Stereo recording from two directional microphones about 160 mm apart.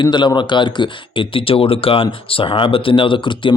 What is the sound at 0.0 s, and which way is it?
Speech, 30° left (ahead or behind).